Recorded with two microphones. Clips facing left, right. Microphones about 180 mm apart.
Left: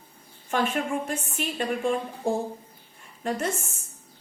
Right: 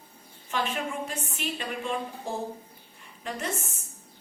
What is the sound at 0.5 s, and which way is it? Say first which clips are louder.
A woman's voice: left 5 dB; 50° left (ahead or behind).